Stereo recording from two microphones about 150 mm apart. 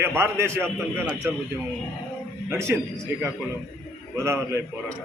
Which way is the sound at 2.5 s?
15° right (ahead or behind).